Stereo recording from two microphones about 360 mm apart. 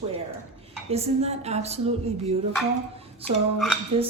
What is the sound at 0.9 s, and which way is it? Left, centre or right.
A woman's voice, centre.